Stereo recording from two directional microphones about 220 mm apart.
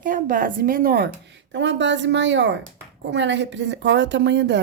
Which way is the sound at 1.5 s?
55° right (ahead or behind).